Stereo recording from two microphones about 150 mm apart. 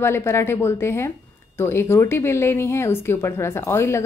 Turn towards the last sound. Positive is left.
turn(degrees=15)  # may be behind; listen again after turning